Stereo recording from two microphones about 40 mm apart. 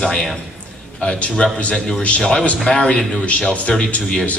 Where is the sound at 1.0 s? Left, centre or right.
Left.